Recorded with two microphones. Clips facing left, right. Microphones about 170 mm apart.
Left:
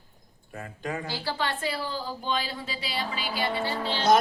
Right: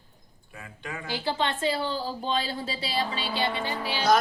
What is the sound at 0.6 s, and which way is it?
Speech, 40° left (ahead or behind).